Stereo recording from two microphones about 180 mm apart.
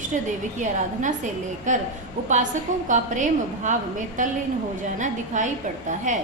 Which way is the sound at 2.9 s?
45° right (ahead or behind).